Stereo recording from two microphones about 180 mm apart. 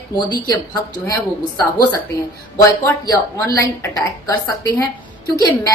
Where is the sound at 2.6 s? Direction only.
20° left (ahead or behind).